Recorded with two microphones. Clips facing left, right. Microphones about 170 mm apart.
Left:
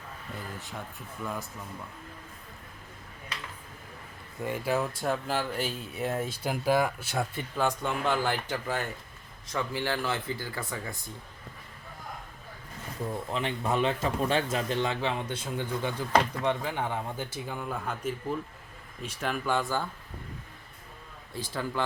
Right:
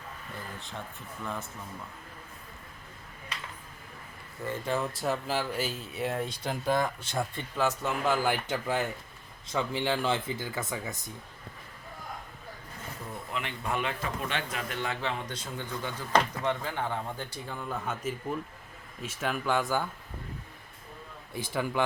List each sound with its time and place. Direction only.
4.4 s speech: 10° left (ahead or behind); by 10.9 s 20° right (ahead or behind)
13.3 s a man's voice: 30° left (ahead or behind); by 19.9 s 10° right (ahead or behind)
21.5 s speech: 15° right (ahead or behind)